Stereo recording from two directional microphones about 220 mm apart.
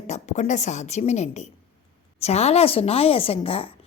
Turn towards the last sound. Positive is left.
turn(degrees=25)  # may be behind; listen again after turning